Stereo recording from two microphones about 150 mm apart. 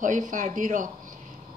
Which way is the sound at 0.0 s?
60° right (ahead or behind).